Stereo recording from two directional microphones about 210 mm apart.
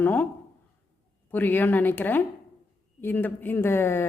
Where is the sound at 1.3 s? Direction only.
10° left (ahead or behind).